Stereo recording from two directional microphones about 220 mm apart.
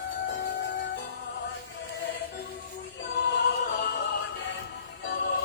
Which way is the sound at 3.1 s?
50° left (ahead or behind).